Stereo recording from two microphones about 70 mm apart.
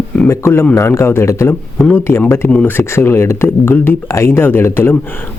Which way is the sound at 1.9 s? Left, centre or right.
Left.